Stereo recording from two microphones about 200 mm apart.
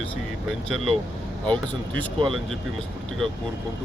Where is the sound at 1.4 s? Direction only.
5° left (ahead or behind).